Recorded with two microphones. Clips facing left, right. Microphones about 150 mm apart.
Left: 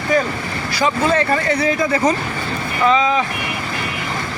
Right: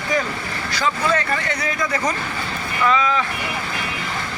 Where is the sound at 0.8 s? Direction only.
25° left (ahead or behind).